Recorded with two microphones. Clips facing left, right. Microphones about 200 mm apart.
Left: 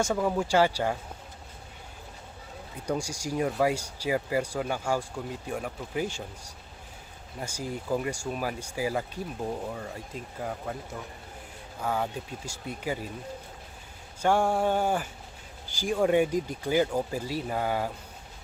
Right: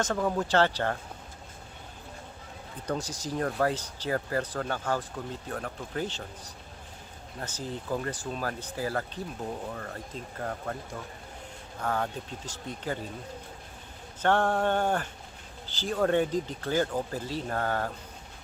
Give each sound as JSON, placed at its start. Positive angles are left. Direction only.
{"t": 0.0, "sound": "speech", "side_deg": 10}
{"t": 2.8, "sound": "speech", "side_deg": 10}
{"t": 14.2, "sound": "speech", "side_deg": 10}